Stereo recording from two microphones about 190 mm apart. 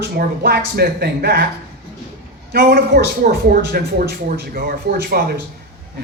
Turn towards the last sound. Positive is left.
turn(degrees=-50)  # may be behind; listen again after turning